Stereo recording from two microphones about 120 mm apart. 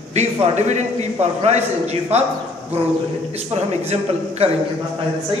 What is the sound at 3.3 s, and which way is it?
Speech, 60° right (ahead or behind).